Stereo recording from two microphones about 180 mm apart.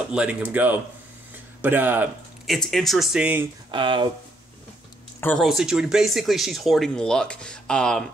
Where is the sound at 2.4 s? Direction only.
Centre (ahead or behind).